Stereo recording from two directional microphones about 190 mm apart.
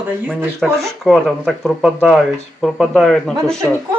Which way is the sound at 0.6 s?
Centre (ahead or behind).